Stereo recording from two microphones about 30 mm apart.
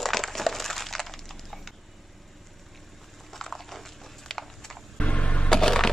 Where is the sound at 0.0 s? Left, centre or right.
Centre.